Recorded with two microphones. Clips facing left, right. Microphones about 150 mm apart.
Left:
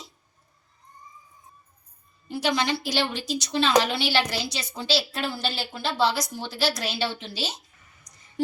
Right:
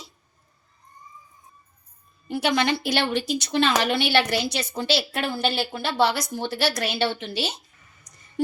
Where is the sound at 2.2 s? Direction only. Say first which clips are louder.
Right 3 dB; 60° right (ahead or behind).